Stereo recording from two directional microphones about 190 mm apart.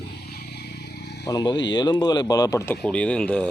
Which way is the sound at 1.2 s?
20° left (ahead or behind).